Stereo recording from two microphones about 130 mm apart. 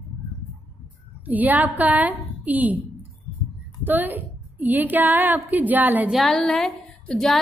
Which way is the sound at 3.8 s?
15° right (ahead or behind).